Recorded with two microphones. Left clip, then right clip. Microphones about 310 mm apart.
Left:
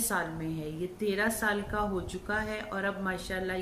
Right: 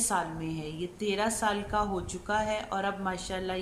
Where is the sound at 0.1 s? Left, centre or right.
Centre.